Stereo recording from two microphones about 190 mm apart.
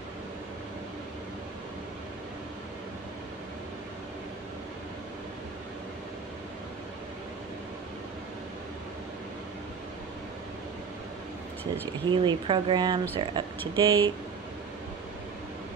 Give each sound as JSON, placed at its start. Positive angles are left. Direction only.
{"t": 12.1, "sound": "speech", "side_deg": -25}